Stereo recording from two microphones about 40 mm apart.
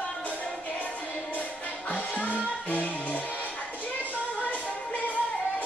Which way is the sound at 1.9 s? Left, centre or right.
Left.